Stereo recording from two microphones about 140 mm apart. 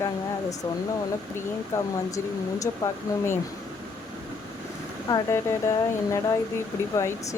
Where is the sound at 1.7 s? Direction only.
20° left (ahead or behind).